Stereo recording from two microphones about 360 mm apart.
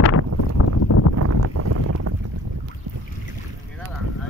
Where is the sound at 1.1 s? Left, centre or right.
Right.